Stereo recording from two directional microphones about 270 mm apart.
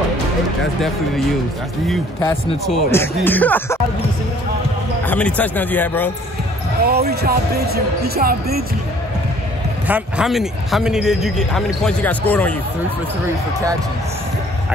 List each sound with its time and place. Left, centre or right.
2.6 s speech: centre
5.0 s speech: centre
6.9 s speech: right
9.8 s speech: centre